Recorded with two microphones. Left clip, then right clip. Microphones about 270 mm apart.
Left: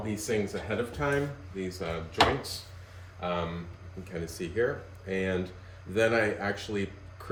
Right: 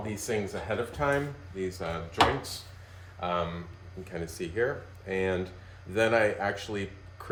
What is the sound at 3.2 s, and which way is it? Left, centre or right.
Speech, centre.